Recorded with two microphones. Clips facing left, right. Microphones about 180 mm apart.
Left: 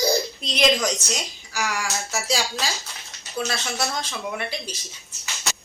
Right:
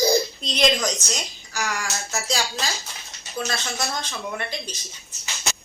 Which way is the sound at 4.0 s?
5° left (ahead or behind).